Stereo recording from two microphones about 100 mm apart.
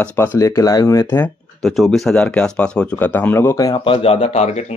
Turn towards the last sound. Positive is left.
turn(degrees=90)